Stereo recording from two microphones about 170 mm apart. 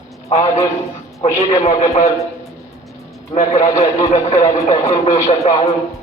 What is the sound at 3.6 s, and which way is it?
A man's voice, 20° left (ahead or behind).